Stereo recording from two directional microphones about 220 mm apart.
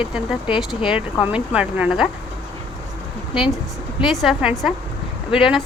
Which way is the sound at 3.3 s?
Centre (ahead or behind).